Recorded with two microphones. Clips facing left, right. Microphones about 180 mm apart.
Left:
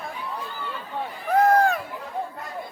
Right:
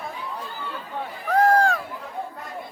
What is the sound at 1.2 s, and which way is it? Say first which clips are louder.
Run: even; 20° left (ahead or behind).